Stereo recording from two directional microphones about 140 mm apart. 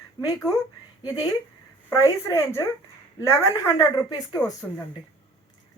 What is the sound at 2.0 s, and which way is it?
Speech, 20° left (ahead or behind).